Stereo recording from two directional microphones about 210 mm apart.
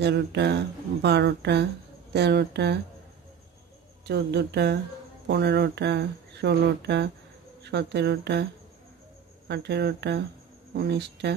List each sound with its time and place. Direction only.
0.0 s speech: 55° right (ahead or behind)
4.0 s speech: 55° right (ahead or behind)
9.5 s speech: 50° right (ahead or behind)